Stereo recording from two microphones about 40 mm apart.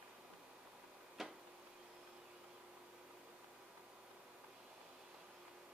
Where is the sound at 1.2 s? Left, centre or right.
Centre.